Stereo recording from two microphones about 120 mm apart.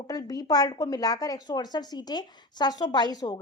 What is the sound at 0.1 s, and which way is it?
A woman's voice, 30° left (ahead or behind).